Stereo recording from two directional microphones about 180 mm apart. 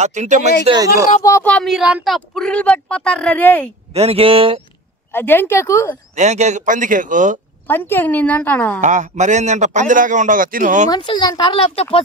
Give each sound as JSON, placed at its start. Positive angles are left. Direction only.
{"t": 0.0, "sound": "speech", "side_deg": -40}
{"t": 1.2, "sound": "a woman's voice", "side_deg": 15}
{"t": 1.5, "sound": "a woman's voice", "side_deg": 0}
{"t": 3.9, "sound": "speech", "side_deg": -35}
{"t": 5.1, "sound": "a woman's voice", "side_deg": 10}
{"t": 6.1, "sound": "a man's voice", "side_deg": -40}
{"t": 7.6, "sound": "a woman's voice", "side_deg": 10}
{"t": 8.8, "sound": "a man's voice", "side_deg": -40}
{"t": 10.9, "sound": "speech", "side_deg": 25}